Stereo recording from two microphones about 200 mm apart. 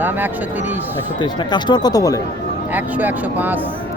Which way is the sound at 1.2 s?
20° left (ahead or behind).